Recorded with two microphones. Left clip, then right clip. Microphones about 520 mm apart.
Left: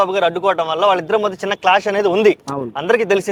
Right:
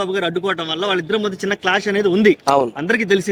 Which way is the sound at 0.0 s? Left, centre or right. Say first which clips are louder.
Left 5 dB; left.